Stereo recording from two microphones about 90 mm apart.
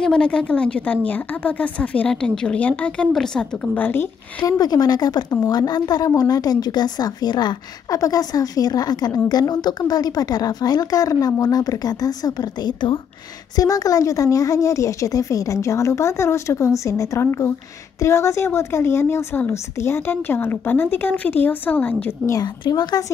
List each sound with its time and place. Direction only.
0.0 s a woman's voice: 10° left (ahead or behind)
3.7 s speech: 20° left (ahead or behind)
4.5 s a woman's voice: 45° left (ahead or behind)
13.6 s speech: 40° left (ahead or behind); by 22.1 s 20° left (ahead or behind)
22.6 s a woman's voice: 50° left (ahead or behind)